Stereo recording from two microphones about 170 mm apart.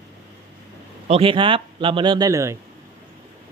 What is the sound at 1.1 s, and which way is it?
Speech, 30° right (ahead or behind).